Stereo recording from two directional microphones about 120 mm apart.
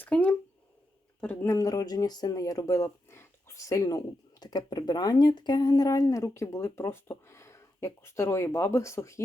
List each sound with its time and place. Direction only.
0.0 s speech: 10° left (ahead or behind)
1.5 s speech: 30° left (ahead or behind)